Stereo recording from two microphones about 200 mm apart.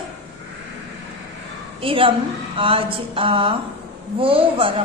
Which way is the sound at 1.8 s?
25° right (ahead or behind).